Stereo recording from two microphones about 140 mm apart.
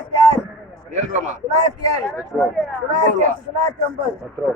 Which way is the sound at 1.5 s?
50° right (ahead or behind).